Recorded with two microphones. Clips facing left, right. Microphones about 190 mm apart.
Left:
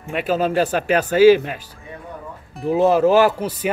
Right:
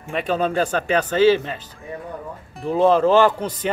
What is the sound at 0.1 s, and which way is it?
Speech, 5° left (ahead or behind).